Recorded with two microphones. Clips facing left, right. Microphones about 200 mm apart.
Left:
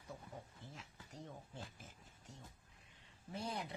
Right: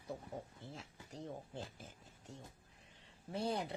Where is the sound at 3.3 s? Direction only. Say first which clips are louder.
Right 6 dB; 30° right (ahead or behind).